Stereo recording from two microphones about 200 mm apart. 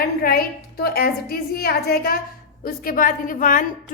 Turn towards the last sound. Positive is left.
turn(degrees=40)  # may be behind; listen again after turning